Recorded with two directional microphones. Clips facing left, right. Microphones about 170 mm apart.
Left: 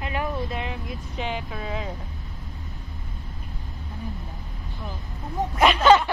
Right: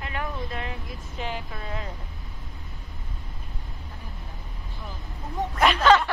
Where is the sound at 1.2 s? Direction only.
Centre (ahead or behind).